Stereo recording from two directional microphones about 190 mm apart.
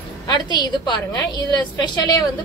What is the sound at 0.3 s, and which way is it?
Speech, 25° left (ahead or behind).